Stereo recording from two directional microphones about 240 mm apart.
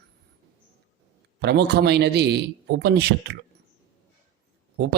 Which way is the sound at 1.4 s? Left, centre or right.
Right.